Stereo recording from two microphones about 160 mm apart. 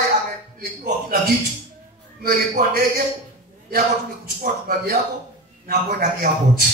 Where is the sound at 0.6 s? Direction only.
70° right (ahead or behind).